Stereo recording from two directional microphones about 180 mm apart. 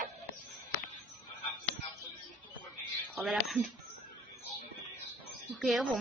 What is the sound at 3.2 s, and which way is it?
Speech, centre (ahead or behind).